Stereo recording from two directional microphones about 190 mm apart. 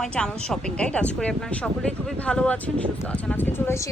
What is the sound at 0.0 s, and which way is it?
A woman's voice, 5° left (ahead or behind).